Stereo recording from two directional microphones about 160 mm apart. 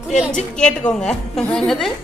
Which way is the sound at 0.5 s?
5° left (ahead or behind).